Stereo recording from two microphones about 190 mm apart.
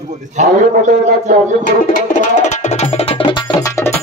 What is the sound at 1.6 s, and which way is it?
Music, 45° left (ahead or behind).